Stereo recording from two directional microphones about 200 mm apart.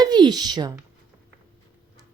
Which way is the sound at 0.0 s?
20° right (ahead or behind).